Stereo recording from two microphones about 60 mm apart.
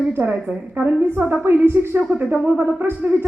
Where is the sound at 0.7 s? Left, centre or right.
Right.